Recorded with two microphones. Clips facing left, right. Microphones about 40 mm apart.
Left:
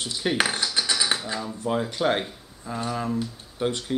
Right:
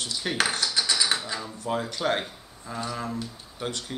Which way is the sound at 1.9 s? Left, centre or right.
Centre.